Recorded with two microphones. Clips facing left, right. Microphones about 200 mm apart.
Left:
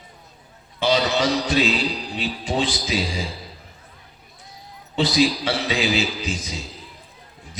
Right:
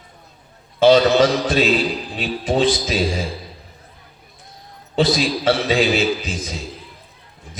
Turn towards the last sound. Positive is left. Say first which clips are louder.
# right 5 dB
turn(degrees=-55)  # may be behind; listen again after turning